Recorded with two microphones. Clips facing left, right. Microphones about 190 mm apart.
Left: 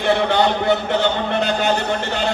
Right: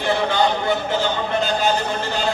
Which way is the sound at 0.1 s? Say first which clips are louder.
Left 2 dB; 65° left (ahead or behind).